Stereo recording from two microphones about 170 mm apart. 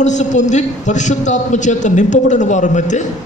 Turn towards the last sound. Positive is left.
turn(degrees=45)  # may be behind; listen again after turning